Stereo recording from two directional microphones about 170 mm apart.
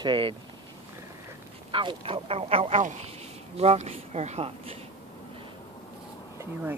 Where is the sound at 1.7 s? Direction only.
30° right (ahead or behind).